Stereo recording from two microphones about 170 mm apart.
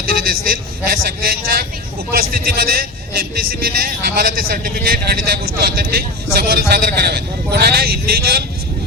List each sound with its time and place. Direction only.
0.9 s a man's voice: 65° right (ahead or behind)